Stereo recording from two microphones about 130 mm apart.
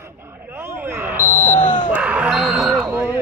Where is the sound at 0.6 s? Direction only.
15° right (ahead or behind).